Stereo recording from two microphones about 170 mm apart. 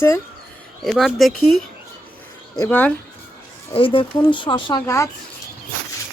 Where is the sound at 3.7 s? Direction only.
30° left (ahead or behind).